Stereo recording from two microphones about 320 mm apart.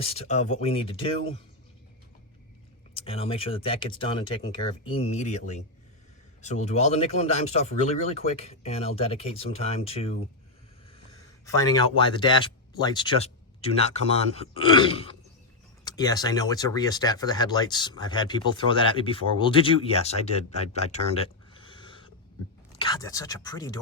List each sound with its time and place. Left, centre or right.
0.0 s speech: centre
2.9 s speech: centre
11.4 s speech: centre
20.7 s a sound: centre
22.8 s speech: centre